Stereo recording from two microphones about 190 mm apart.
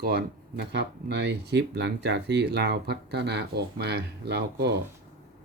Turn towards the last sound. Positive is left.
turn(degrees=-60)  # may be behind; listen again after turning